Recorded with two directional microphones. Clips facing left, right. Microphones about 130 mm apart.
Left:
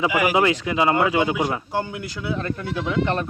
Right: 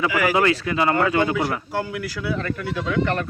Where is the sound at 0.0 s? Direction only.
15° left (ahead or behind).